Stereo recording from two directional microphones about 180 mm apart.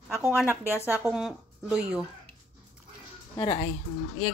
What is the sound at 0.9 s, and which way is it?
A woman's voice, 5° right (ahead or behind).